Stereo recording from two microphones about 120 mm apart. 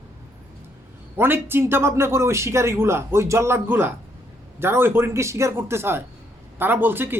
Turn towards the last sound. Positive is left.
turn(degrees=-15)  # may be behind; listen again after turning